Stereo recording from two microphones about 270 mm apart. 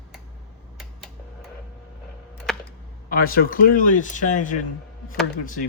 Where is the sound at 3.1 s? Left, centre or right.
Left.